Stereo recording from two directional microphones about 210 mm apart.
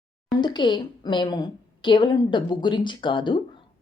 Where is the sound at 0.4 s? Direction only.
20° left (ahead or behind).